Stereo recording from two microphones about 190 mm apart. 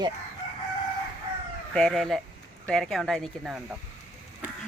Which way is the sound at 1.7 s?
Centre (ahead or behind).